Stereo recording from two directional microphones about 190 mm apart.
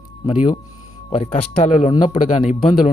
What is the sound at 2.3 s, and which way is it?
Speech, 40° left (ahead or behind).